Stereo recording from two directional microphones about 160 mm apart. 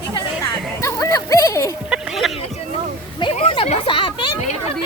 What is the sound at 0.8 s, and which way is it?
Music, 20° left (ahead or behind).